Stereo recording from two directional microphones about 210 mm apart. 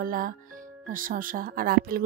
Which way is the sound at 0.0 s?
40° right (ahead or behind).